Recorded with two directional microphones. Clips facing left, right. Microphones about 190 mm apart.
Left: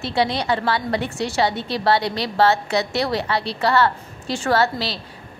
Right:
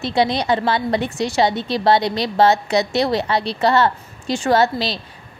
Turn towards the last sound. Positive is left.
turn(degrees=-20)  # may be behind; listen again after turning